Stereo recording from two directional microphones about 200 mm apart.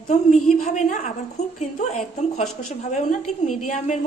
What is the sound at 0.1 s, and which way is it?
A woman's voice, 35° left (ahead or behind).